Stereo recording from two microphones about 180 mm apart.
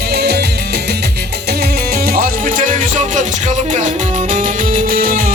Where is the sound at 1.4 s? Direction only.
60° right (ahead or behind).